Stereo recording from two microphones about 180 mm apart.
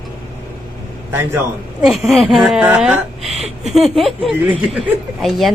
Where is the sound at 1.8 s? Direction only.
5° right (ahead or behind).